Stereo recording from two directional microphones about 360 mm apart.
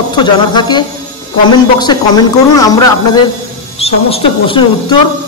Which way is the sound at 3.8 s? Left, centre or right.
Centre.